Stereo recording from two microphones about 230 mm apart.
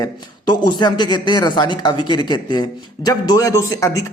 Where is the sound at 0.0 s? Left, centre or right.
Centre.